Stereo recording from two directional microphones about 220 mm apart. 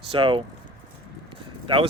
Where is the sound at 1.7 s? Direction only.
25° right (ahead or behind).